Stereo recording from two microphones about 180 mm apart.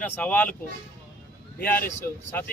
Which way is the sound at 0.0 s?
10° left (ahead or behind).